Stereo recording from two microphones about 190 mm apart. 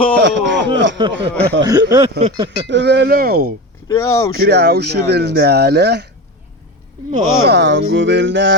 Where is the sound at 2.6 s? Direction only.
65° right (ahead or behind).